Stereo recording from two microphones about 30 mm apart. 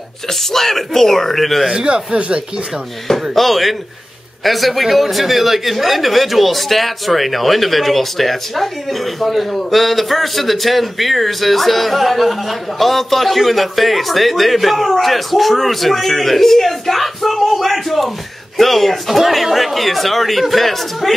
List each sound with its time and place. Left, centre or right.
0.3 s speech: centre
2.1 s speech: right
3.1 s speech: centre